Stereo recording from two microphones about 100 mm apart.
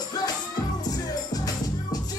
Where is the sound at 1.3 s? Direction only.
40° left (ahead or behind).